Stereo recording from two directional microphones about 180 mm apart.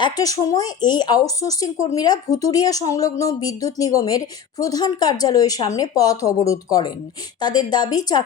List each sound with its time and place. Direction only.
0.0 s speech: 20° left (ahead or behind)